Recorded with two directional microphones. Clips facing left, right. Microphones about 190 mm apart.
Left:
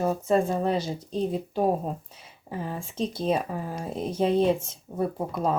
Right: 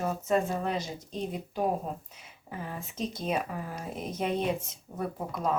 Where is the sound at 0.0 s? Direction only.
30° left (ahead or behind).